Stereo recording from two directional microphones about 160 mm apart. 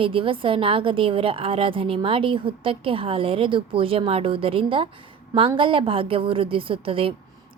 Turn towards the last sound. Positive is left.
turn(degrees=-35)  # may be behind; listen again after turning